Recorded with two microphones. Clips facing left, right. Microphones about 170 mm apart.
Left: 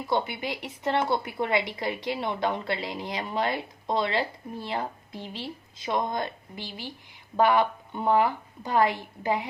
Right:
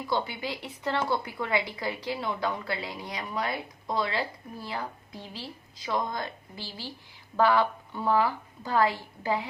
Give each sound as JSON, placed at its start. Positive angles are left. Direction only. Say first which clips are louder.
{"t": 0.1, "sound": "a woman's voice", "louder": "left 3 dB", "side_deg": 20}